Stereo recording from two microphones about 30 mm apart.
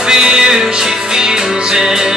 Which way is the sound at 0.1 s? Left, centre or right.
Right.